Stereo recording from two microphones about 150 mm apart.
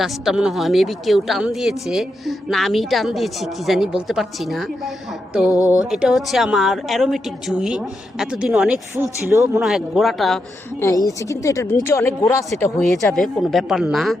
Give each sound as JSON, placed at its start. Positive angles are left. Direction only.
{"t": 0.0, "sound": "speech", "side_deg": -5}
{"t": 5.9, "sound": "speech", "side_deg": -5}
{"t": 9.0, "sound": "speech", "side_deg": -20}
{"t": 9.6, "sound": "speech", "side_deg": 0}
{"t": 10.8, "sound": "speech", "side_deg": 20}
{"t": 12.9, "sound": "speech", "side_deg": 0}